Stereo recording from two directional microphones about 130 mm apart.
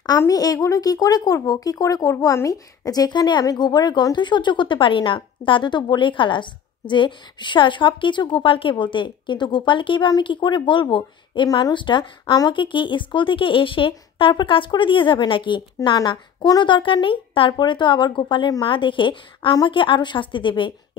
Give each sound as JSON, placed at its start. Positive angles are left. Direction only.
{"t": 0.2, "sound": "speech", "side_deg": 30}